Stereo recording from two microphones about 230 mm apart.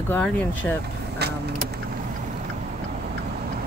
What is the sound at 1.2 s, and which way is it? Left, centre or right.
Vehicle, right.